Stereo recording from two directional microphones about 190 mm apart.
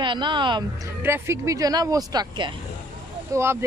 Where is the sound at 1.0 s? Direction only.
15° right (ahead or behind).